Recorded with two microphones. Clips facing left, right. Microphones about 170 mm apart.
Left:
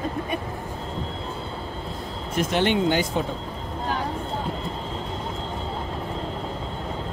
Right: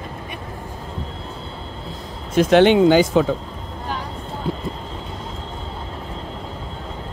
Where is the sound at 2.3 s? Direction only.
90° right.